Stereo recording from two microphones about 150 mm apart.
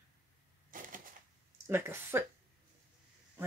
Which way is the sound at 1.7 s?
15° right (ahead or behind).